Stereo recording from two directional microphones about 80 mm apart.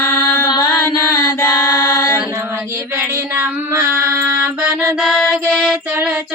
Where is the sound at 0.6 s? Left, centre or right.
Left.